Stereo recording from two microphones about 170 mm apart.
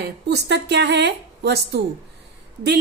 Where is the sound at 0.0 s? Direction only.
75° right (ahead or behind).